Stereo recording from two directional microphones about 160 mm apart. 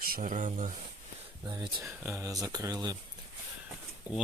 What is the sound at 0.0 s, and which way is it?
Speech, 60° right (ahead or behind).